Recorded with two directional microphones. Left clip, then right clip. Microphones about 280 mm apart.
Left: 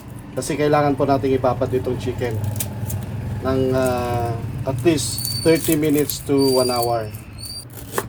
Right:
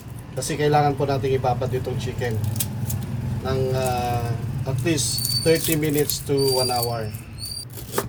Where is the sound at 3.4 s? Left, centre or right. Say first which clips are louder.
Left 5 dB; left.